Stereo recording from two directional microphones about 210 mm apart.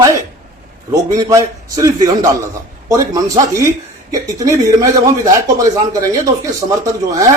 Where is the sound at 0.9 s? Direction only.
15° right (ahead or behind).